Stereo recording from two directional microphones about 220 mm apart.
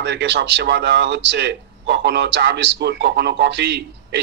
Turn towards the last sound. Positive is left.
turn(degrees=-50)  # may be behind; listen again after turning